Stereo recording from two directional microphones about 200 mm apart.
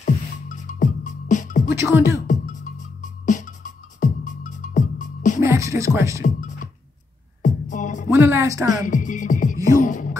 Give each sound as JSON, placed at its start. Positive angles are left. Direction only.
{"t": 0.0, "sound": "music", "side_deg": 40}
{"t": 1.8, "sound": "a woman's voice", "side_deg": -15}
{"t": 2.2, "sound": "music", "side_deg": 40}
{"t": 5.4, "sound": "music", "side_deg": -15}
{"t": 6.2, "sound": "music", "side_deg": 40}
{"t": 8.1, "sound": "a woman's voice", "side_deg": -15}
{"t": 8.8, "sound": "speech", "side_deg": 40}
{"t": 9.8, "sound": "beatboxing", "side_deg": 40}